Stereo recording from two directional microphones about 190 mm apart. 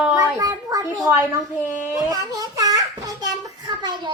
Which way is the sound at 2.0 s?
20° right (ahead or behind).